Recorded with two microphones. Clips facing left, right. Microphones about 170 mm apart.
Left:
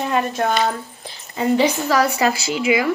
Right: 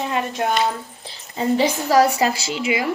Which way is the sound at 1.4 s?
35° right (ahead or behind).